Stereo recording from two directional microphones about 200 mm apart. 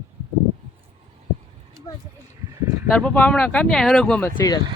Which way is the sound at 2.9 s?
5° left (ahead or behind).